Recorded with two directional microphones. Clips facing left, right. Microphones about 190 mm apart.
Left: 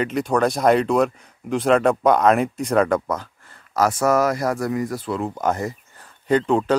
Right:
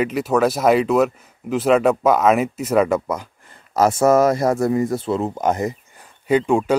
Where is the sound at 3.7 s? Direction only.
25° right (ahead or behind).